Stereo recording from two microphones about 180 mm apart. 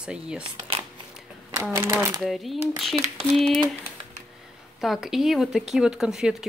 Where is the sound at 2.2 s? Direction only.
Centre (ahead or behind).